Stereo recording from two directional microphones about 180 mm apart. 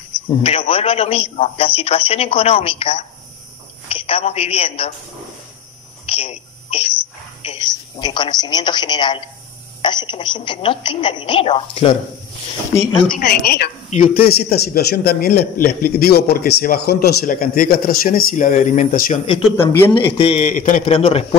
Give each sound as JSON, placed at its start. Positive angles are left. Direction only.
{"t": 0.4, "sound": "a man's voice", "side_deg": 30}
{"t": 6.0, "sound": "a sound", "side_deg": 35}
{"t": 8.0, "sound": "a woman's voice", "side_deg": 25}
{"t": 13.1, "sound": "a man's voice", "side_deg": 60}
{"t": 13.8, "sound": "a man's voice", "side_deg": 50}
{"t": 19.5, "sound": "speech", "side_deg": 15}
{"t": 19.9, "sound": "a man's voice", "side_deg": 30}
{"t": 20.4, "sound": "a man's voice", "side_deg": 45}
{"t": 20.8, "sound": "a man's voice", "side_deg": 35}